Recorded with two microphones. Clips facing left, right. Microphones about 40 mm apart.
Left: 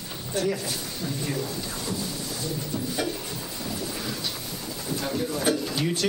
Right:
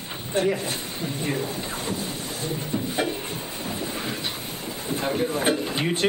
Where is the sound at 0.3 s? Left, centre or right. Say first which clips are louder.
Right 3 dB; right.